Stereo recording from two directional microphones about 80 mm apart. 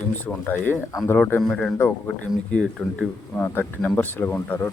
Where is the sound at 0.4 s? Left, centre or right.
Left.